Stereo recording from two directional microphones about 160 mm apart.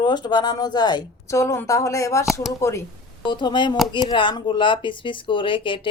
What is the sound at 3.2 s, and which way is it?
A woman's voice, 30° left (ahead or behind).